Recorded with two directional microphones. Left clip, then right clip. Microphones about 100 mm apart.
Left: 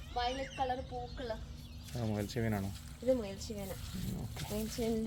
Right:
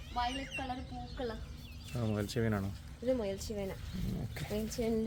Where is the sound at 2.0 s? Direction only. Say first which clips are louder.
Right 2 dB; 30° right (ahead or behind).